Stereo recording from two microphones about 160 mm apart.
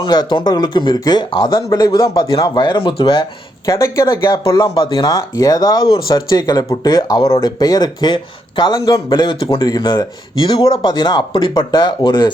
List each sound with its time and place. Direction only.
0.0 s speech: 25° left (ahead or behind)
3.7 s speech: 20° left (ahead or behind)